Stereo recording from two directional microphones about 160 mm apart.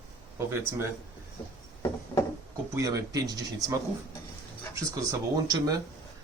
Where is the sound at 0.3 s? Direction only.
15° right (ahead or behind).